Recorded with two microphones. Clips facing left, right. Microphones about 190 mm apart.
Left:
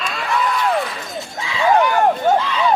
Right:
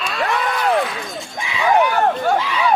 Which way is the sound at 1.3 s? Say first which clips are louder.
Left 1 dB; 15° right (ahead or behind).